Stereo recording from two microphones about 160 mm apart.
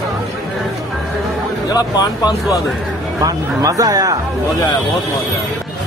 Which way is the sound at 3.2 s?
20° right (ahead or behind).